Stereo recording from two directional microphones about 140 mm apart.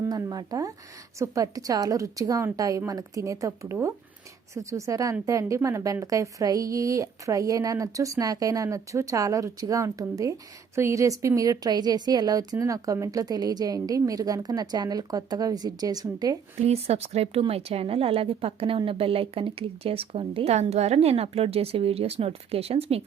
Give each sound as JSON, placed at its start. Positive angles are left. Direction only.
{"t": 0.0, "sound": "a woman's voice", "side_deg": -30}
{"t": 16.6, "sound": "a woman's voice", "side_deg": -45}